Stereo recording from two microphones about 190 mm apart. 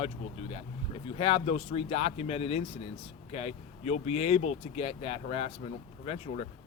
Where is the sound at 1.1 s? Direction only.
30° left (ahead or behind).